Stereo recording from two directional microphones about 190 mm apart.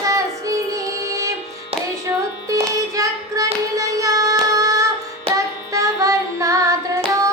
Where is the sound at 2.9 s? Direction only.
20° right (ahead or behind).